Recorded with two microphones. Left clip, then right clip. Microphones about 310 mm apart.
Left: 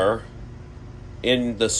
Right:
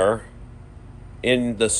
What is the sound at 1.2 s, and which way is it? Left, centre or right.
Speech, right.